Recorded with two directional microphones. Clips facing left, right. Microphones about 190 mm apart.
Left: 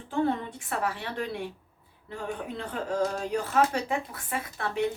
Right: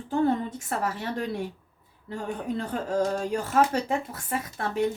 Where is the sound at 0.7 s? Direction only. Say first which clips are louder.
Right 1 dB; 40° right (ahead or behind).